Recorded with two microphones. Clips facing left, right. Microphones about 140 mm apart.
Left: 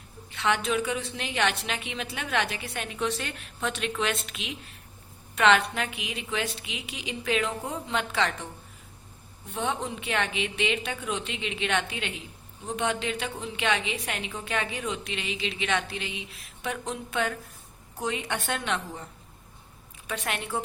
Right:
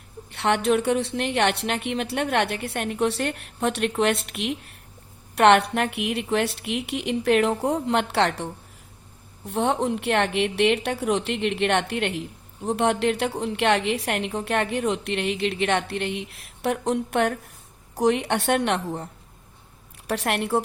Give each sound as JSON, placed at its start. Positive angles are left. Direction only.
{"t": 0.3, "sound": "a woman's voice", "side_deg": -65}
{"t": 9.5, "sound": "a woman's voice", "side_deg": -70}
{"t": 20.1, "sound": "a woman's voice", "side_deg": -70}